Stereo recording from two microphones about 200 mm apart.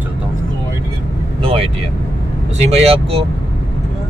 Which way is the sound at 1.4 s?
30° right (ahead or behind).